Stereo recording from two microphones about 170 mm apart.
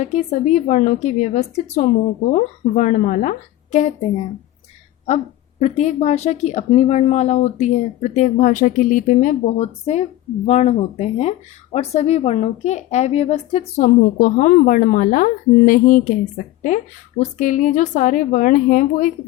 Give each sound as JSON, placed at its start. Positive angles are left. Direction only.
{"t": 0.0, "sound": "speech", "side_deg": 45}
{"t": 5.0, "sound": "speech", "side_deg": 40}